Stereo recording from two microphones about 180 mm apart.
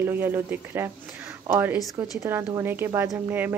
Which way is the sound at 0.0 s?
10° right (ahead or behind).